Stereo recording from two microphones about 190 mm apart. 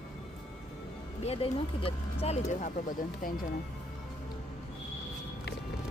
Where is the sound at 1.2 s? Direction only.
30° left (ahead or behind); by 3.3 s 45° left (ahead or behind).